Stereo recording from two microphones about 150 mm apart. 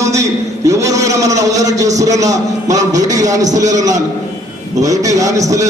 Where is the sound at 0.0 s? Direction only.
20° right (ahead or behind).